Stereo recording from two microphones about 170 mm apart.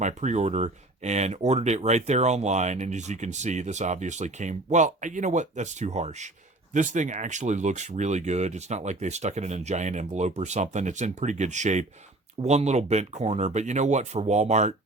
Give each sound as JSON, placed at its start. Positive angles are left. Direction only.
{"t": 0.0, "sound": "speech", "side_deg": -45}